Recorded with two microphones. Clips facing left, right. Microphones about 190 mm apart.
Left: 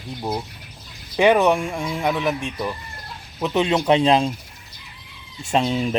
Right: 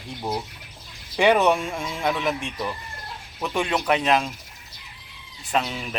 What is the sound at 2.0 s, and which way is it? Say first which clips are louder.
Speech: left 2 dB; centre (ahead or behind).